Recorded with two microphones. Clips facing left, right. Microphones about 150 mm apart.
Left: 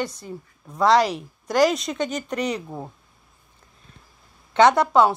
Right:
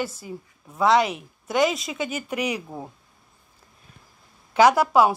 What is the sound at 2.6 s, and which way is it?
Speech, 5° left (ahead or behind).